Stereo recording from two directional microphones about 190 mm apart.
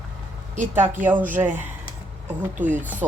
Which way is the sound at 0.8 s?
10° right (ahead or behind).